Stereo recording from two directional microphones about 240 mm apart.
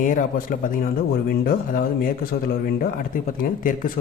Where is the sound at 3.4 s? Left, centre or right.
Left.